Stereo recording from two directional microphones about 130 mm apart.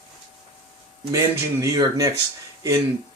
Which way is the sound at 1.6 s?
30° right (ahead or behind).